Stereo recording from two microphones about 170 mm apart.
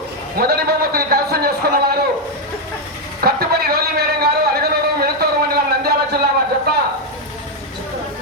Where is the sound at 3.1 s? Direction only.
65° right (ahead or behind).